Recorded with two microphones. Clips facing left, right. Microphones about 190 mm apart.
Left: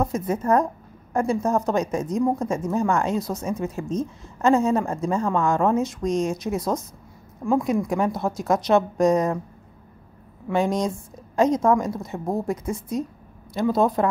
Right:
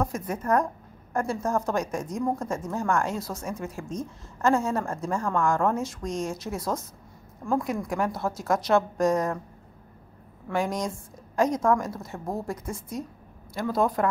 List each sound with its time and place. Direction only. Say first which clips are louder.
0.0 s a woman's voice: left 5 dB; 25° left (ahead or behind)
10.5 s a woman's voice: left 5 dB; 25° left (ahead or behind)